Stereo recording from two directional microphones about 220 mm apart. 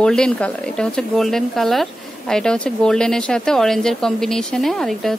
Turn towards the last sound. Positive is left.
turn(degrees=0)  # may be behind; listen again after turning